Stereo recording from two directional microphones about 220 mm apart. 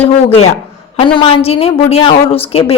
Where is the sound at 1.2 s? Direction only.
25° left (ahead or behind).